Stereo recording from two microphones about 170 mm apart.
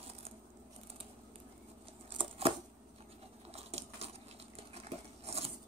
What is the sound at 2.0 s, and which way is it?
Scissors, 35° right (ahead or behind).